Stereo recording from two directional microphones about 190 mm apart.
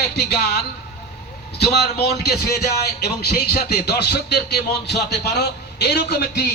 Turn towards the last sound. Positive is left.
turn(degrees=60)  # may be behind; listen again after turning